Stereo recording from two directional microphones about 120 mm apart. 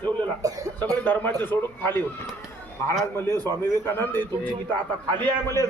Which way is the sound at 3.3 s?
35° right (ahead or behind).